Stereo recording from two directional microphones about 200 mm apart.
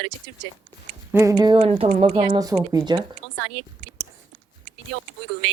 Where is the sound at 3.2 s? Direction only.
90° right.